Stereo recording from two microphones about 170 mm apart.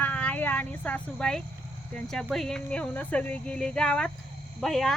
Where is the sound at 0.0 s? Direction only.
10° left (ahead or behind).